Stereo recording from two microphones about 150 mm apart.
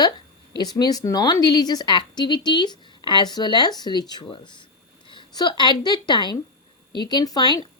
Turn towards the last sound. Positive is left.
turn(degrees=30)  # may be behind; listen again after turning